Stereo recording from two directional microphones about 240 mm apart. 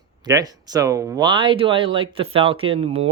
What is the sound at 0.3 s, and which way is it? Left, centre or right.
Speech, centre.